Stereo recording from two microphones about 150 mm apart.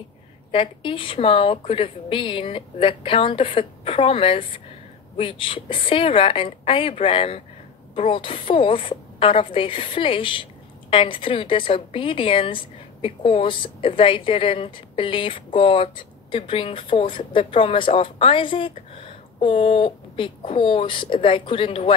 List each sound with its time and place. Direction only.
0.5 s a woman's voice: 35° left (ahead or behind)